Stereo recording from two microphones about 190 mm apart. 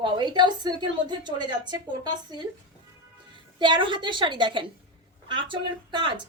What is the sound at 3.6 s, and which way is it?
A woman's voice, 25° right (ahead or behind).